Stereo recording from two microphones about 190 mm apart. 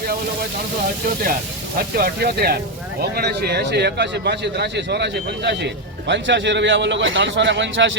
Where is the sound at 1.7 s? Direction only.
50° right (ahead or behind); by 8.0 s 75° right (ahead or behind).